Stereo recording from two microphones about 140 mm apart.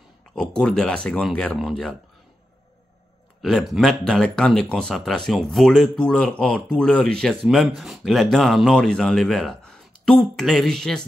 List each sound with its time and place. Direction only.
0.3 s speech: 5° left (ahead or behind)
3.4 s speech: centre (ahead or behind)